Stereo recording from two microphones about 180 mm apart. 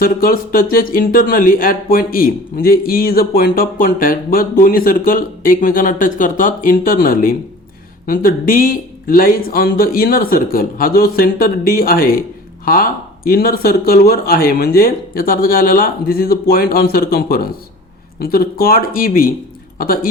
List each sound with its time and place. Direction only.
0.0 s speech: 55° left (ahead or behind)